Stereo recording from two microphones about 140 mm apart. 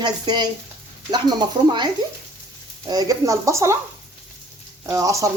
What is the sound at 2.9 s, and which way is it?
Speech, 25° right (ahead or behind).